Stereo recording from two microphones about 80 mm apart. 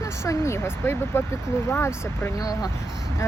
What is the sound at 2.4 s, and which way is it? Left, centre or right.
Speech, left.